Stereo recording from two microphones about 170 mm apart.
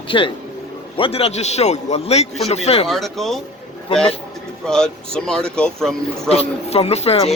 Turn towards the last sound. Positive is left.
turn(degrees=40)  # may be behind; listen again after turning